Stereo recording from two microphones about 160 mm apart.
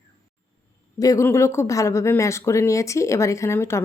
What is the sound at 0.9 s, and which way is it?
A woman's voice, 20° left (ahead or behind).